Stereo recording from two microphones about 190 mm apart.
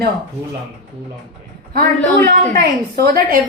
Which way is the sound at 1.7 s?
50° right (ahead or behind).